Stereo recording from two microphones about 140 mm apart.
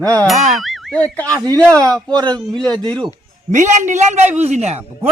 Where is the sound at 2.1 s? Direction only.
30° right (ahead or behind).